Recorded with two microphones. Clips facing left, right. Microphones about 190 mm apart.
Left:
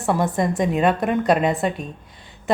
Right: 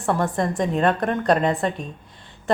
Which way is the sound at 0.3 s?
5° left (ahead or behind).